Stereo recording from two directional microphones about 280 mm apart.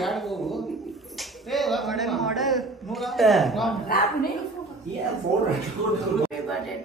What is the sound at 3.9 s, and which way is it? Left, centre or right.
Speech, left.